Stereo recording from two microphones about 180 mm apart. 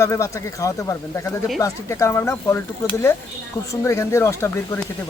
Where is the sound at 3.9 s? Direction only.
15° left (ahead or behind).